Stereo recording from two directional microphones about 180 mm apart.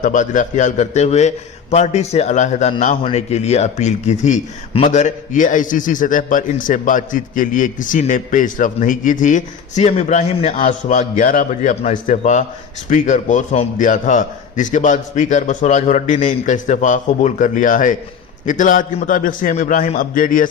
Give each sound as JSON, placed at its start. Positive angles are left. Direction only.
{"t": 0.0, "sound": "a man's voice", "side_deg": 45}